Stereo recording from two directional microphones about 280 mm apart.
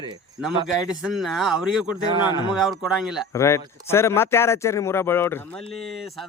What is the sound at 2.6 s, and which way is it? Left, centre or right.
Speech, centre.